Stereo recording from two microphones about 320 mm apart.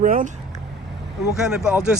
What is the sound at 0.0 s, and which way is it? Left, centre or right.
Speech, right.